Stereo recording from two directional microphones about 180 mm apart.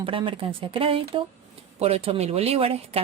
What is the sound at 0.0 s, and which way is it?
Speech, 30° right (ahead or behind).